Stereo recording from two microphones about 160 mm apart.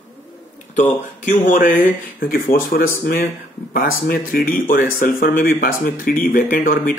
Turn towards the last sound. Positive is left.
turn(degrees=60)  # may be behind; listen again after turning